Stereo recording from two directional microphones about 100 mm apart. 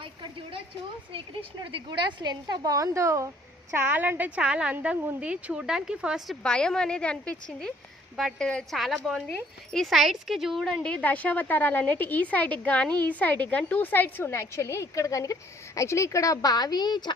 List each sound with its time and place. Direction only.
0.0 s a sound: 65° right (ahead or behind)
1.1 s speech: 60° right (ahead or behind)
1.9 s a woman's voice: 50° right (ahead or behind); by 3.2 s 30° right (ahead or behind)
3.8 s a woman's voice: 20° right (ahead or behind)
6.4 s a woman's voice: 10° left (ahead or behind)
8.1 s a woman's voice: centre (ahead or behind); by 17.0 s 45° left (ahead or behind)